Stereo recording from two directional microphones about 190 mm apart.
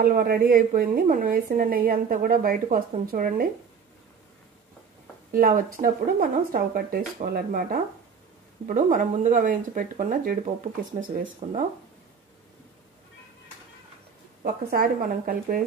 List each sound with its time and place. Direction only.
0.0 s a woman's voice: 50° right (ahead or behind)
5.3 s a woman's voice: 45° right (ahead or behind)
14.4 s a woman's voice: 50° right (ahead or behind)